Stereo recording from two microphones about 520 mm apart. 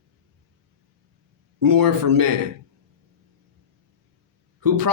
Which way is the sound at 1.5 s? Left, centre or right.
Right.